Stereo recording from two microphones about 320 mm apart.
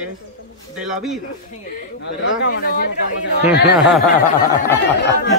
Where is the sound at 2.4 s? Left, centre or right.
Left.